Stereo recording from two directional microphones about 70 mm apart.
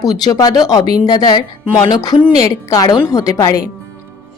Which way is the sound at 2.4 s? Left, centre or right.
Left.